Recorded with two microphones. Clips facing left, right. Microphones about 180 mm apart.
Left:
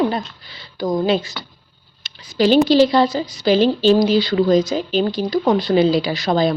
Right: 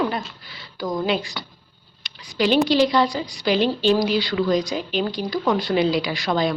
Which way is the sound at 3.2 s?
Centre (ahead or behind).